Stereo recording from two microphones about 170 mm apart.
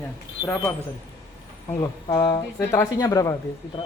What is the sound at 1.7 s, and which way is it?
A man's voice, 20° left (ahead or behind).